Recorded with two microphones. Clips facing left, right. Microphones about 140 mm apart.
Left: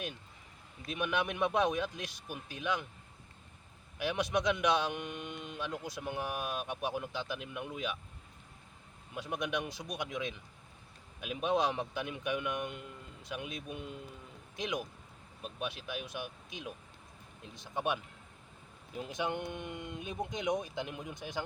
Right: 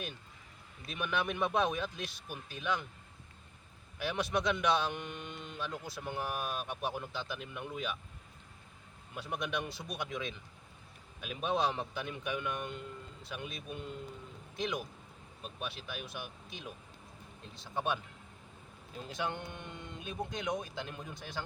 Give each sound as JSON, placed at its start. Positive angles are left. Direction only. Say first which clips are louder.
{"t": 0.9, "sound": "a man's voice", "louder": "left 1 dB", "side_deg": 15}
{"t": 3.9, "sound": "a man's voice", "louder": "left 1 dB", "side_deg": 15}
{"t": 9.1, "sound": "a man's voice", "louder": "left 1 dB", "side_deg": 15}